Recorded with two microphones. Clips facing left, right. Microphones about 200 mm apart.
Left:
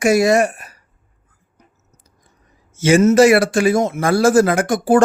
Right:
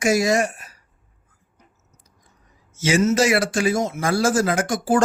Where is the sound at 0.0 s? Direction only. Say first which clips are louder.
Left 5 dB; 60° left (ahead or behind).